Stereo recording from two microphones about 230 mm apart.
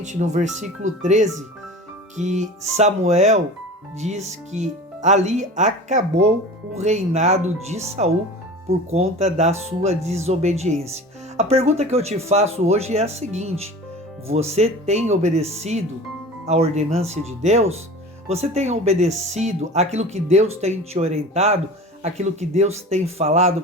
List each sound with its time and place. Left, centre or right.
0.0 s speech: right